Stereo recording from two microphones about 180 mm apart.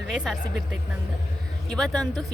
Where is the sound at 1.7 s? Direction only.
5° left (ahead or behind).